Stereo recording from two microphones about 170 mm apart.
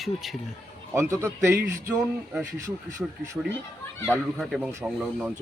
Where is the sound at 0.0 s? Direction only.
Centre (ahead or behind).